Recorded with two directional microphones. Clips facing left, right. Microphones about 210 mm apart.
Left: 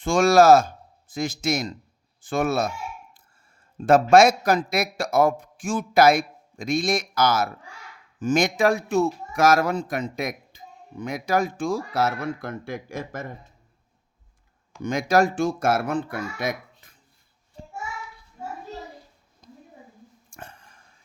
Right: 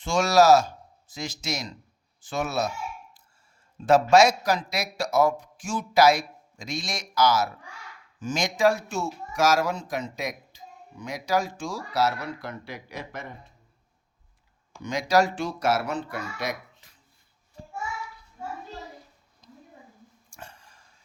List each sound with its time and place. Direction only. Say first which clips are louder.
0.0 s speech: left 4 dB; 50° left (ahead or behind)
3.8 s a man's voice: left 3 dB; 55° left (ahead or behind)
14.8 s speech: left 2 dB; 50° left (ahead or behind)
19.4 s a sound: left 3 dB; 55° left (ahead or behind)